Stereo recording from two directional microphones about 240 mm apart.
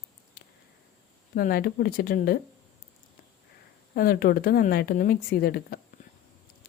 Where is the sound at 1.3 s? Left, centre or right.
Left.